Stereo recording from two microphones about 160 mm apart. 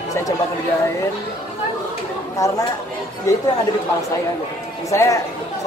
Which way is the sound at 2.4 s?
20° left (ahead or behind).